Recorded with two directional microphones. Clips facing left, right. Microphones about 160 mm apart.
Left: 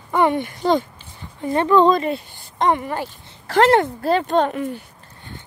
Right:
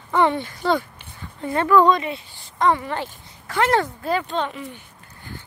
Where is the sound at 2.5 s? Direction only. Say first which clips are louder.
Left 1 dB; 20° left (ahead or behind).